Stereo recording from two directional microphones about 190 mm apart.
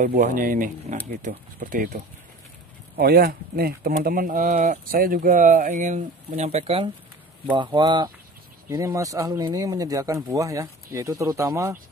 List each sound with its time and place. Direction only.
0.0 s speech: 45° right (ahead or behind)
3.0 s speech: 55° right (ahead or behind); by 11.8 s 15° right (ahead or behind)